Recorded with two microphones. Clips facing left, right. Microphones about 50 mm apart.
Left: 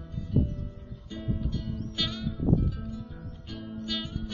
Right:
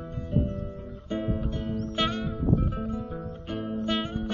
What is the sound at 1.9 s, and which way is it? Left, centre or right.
Music, right.